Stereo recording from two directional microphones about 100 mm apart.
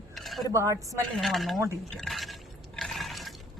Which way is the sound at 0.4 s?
30° right (ahead or behind).